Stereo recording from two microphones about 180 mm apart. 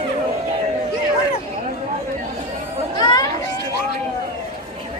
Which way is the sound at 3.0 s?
20° left (ahead or behind).